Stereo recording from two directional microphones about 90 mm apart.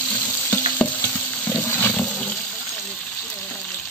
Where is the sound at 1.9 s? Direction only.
10° left (ahead or behind).